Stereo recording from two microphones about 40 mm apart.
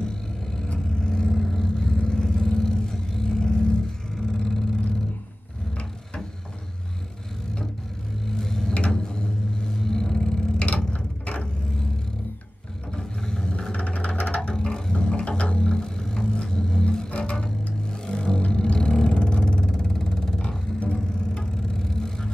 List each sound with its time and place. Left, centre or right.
0.0 s vehicle: centre
1.3 s vehicle: centre
1.8 s vehicle: centre
8.3 s a sound: centre
8.7 s vehicle: left
12.9 s music: centre
18.0 s vehicle: left
19.9 s music: centre
20.4 s music: left
21.7 s vehicle: centre